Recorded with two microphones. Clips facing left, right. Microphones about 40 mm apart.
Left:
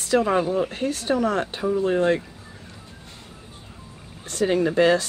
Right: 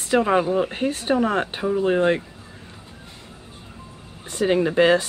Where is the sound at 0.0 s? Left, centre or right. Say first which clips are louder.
Right 1 dB; right.